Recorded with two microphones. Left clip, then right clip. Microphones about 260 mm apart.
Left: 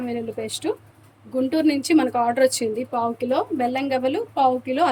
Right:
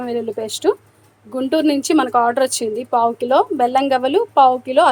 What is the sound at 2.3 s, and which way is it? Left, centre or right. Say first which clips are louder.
A woman's voice: right 1 dB; centre.